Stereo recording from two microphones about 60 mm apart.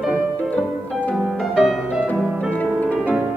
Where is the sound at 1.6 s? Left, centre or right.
Centre.